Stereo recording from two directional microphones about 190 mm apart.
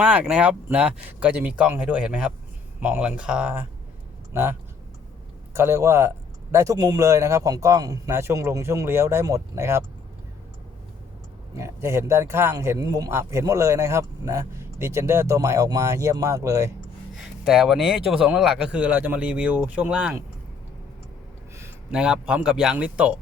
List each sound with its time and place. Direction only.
0.0 s a man's voice: 5° right (ahead or behind)
5.5 s a man's voice: 15° right (ahead or behind)
11.5 s a man's voice: 15° right (ahead or behind)
17.2 s a man's voice: centre (ahead or behind)
21.5 s speech: 10° right (ahead or behind)